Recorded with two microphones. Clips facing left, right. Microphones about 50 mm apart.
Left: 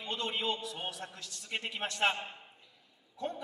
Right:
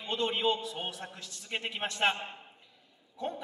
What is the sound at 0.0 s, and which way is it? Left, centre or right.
A man's voice, right.